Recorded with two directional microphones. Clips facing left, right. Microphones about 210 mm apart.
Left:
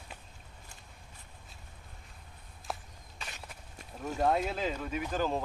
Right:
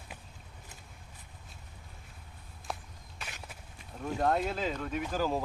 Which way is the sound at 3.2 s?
5° right (ahead or behind).